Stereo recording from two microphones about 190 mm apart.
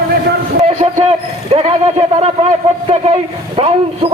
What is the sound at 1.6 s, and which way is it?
A man's voice, 35° right (ahead or behind).